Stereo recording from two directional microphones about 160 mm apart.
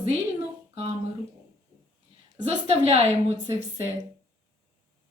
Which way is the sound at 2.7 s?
40° right (ahead or behind).